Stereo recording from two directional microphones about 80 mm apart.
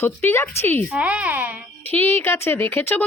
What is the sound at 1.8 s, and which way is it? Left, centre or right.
A woman's voice, left.